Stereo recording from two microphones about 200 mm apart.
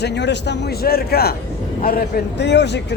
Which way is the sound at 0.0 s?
60° left (ahead or behind).